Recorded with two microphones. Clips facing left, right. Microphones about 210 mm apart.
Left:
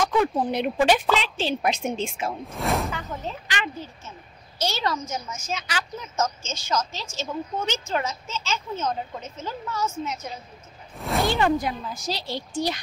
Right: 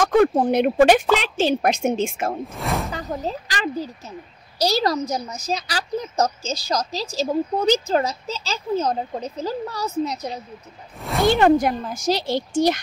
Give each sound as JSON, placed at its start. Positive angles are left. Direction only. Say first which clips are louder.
{"t": 0.0, "sound": "a woman's voice", "louder": "right 6 dB", "side_deg": -50}
{"t": 2.4, "sound": "speech", "louder": "even", "side_deg": 0}
{"t": 2.9, "sound": "a woman's voice", "louder": "right 5 dB", "side_deg": -35}
{"t": 11.2, "sound": "a woman's voice", "louder": "right 9 dB", "side_deg": -60}